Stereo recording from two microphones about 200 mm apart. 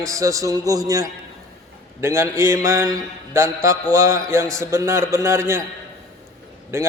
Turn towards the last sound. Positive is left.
turn(degrees=-15)  # may be behind; listen again after turning